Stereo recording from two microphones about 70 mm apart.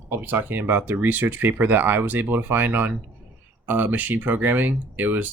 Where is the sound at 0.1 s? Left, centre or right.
Right.